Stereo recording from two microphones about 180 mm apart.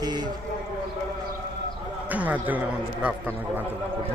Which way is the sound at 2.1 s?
10° right (ahead or behind).